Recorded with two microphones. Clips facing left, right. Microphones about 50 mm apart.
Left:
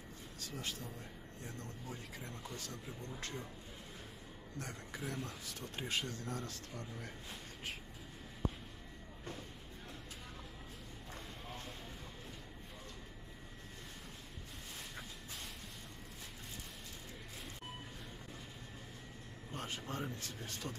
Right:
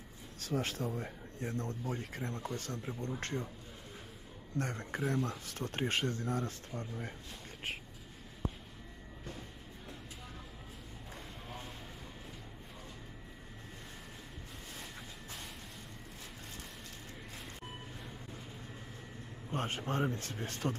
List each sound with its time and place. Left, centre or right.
0.4 s speech: right
4.6 s speech: right
19.5 s speech: right